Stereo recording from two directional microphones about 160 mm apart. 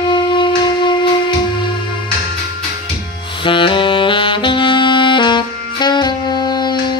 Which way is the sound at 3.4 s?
30° left (ahead or behind).